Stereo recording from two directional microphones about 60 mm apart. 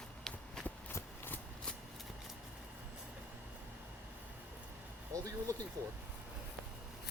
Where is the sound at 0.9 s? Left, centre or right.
Left.